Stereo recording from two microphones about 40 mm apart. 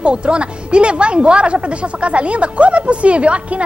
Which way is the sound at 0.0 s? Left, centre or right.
Right.